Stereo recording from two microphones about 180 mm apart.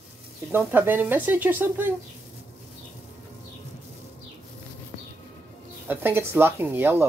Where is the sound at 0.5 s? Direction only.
10° right (ahead or behind).